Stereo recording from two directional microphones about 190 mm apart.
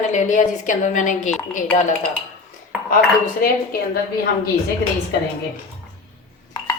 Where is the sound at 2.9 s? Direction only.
50° left (ahead or behind).